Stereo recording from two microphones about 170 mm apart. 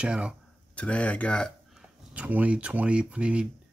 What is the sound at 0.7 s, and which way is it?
Speech, 10° left (ahead or behind).